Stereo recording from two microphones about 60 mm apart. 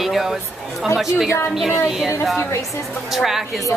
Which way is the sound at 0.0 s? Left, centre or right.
Centre.